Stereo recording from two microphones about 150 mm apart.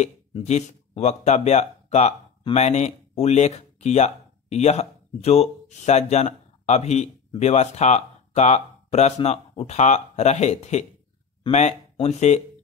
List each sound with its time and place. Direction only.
0.0 s speech: 50° left (ahead or behind)